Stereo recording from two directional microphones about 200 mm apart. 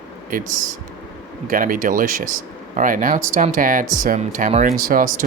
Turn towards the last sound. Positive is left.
turn(degrees=-45)  # may be behind; listen again after turning